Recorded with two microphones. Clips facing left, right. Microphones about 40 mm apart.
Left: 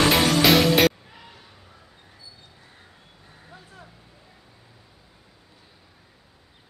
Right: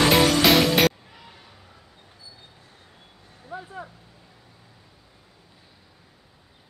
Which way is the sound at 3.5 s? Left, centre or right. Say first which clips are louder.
Right 12 dB; right.